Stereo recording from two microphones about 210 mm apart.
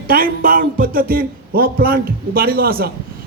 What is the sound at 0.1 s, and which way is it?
A woman's voice, 45° right (ahead or behind).